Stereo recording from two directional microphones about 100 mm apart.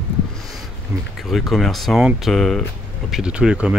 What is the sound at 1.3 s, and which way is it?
Speech, centre (ahead or behind).